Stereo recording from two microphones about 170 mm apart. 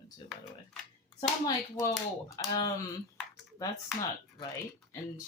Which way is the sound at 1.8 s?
20° left (ahead or behind).